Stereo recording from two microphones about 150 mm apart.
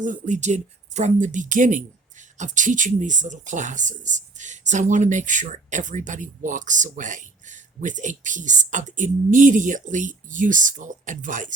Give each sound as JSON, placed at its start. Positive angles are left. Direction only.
{"t": 0.0, "sound": "speech", "side_deg": -55}